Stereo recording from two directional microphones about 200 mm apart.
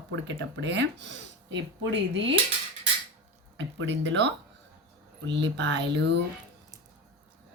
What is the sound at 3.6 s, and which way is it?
Speech, 70° right (ahead or behind).